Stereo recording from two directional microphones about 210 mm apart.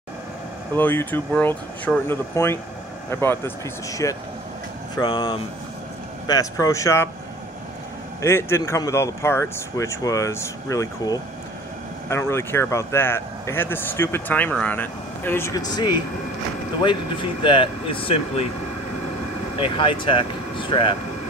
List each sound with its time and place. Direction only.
0.7 s speech: 10° left (ahead or behind)
8.2 s speech: 10° left (ahead or behind)
19.6 s speech: 25° left (ahead or behind)